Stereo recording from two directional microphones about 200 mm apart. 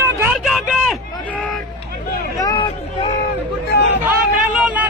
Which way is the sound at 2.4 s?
20° left (ahead or behind).